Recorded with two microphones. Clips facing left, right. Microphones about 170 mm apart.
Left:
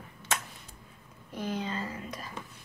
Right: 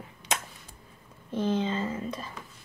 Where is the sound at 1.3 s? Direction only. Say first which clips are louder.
Right 6 dB; 25° right (ahead or behind).